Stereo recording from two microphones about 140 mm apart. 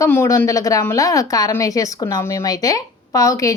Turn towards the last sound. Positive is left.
turn(degrees=25)  # may be behind; listen again after turning